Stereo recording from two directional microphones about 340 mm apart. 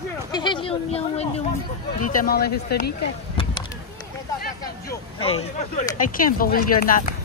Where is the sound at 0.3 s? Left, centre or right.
Centre.